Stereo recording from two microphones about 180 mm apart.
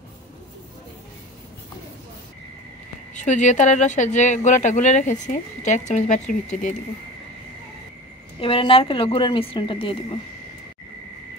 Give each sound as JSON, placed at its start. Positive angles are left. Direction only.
{"t": 3.2, "sound": "speech", "side_deg": 45}
{"t": 8.4, "sound": "a woman's voice", "side_deg": 30}